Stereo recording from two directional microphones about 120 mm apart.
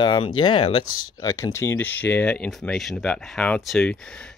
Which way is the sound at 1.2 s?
25° left (ahead or behind).